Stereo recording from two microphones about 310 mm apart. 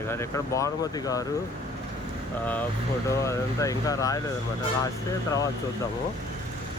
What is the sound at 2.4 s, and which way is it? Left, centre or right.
Speech, centre.